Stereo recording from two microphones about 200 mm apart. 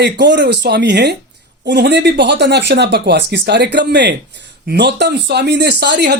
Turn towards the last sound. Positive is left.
turn(degrees=-55)  # may be behind; listen again after turning